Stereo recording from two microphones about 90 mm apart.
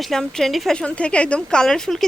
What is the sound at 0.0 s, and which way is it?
Speech, 5° left (ahead or behind).